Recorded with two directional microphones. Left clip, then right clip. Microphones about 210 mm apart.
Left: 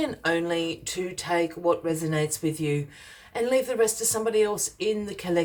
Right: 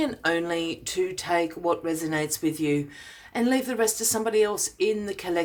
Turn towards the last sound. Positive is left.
turn(degrees=-30)  # may be behind; listen again after turning